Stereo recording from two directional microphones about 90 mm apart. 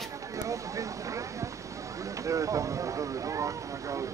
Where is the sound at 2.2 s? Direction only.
35° right (ahead or behind).